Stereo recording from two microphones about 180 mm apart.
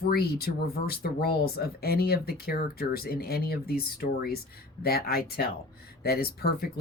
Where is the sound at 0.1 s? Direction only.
60° left (ahead or behind).